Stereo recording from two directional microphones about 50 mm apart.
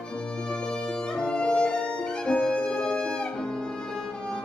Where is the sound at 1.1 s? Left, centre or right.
Centre.